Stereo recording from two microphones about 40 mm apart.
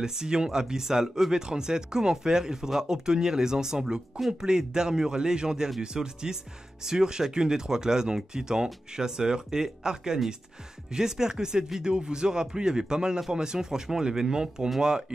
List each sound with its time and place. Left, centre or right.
0.0 s speech: centre